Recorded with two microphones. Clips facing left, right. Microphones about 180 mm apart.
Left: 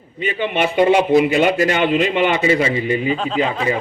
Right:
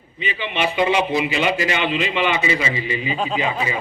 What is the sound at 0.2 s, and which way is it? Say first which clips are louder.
A man's voice: left 5 dB; 50° left (ahead or behind).